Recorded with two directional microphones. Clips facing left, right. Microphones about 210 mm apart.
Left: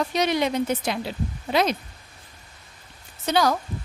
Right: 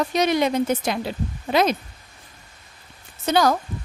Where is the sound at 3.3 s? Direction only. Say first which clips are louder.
Right 3 dB; 45° right (ahead or behind).